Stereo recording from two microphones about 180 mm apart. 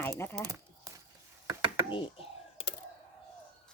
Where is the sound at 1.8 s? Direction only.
30° left (ahead or behind).